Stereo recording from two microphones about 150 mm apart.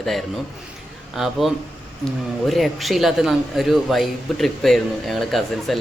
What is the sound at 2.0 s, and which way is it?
Speech, centre (ahead or behind).